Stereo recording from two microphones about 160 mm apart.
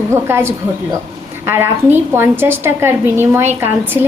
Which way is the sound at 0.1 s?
15° right (ahead or behind).